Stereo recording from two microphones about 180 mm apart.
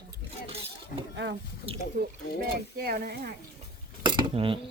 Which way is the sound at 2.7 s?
55° right (ahead or behind).